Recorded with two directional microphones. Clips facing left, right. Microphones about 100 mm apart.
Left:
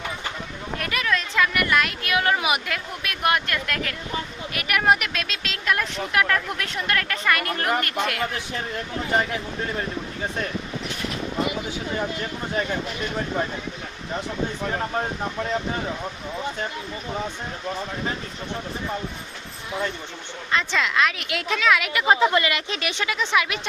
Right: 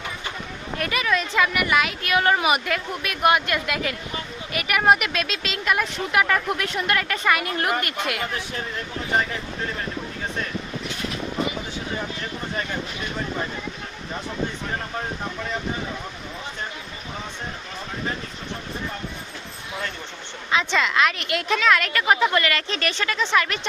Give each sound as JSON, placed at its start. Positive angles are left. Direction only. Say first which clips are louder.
{"t": 0.8, "sound": "speech", "louder": "right 2 dB", "side_deg": 0}
{"t": 20.5, "sound": "speech", "louder": "right 2 dB", "side_deg": 0}
{"t": 22.0, "sound": "speech", "louder": "left 3 dB", "side_deg": 25}